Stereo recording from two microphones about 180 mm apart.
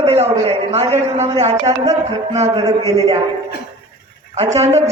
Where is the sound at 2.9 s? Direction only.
20° right (ahead or behind).